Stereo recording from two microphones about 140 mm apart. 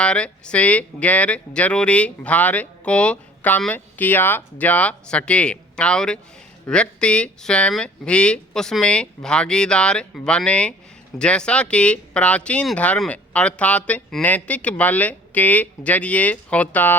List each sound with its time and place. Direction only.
0.0 s speech: 5° left (ahead or behind)